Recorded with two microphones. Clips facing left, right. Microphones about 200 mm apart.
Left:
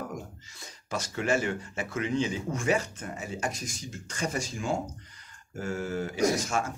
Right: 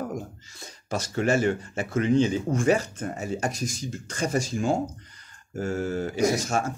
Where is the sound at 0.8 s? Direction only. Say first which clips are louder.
Right 4 dB; 40° right (ahead or behind).